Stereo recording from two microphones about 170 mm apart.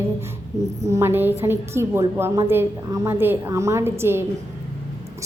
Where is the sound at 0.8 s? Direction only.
15° right (ahead or behind).